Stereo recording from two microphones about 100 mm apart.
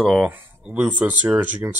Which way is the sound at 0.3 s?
15° right (ahead or behind).